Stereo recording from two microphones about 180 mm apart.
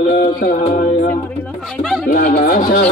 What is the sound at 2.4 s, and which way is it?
Speech, 50° left (ahead or behind).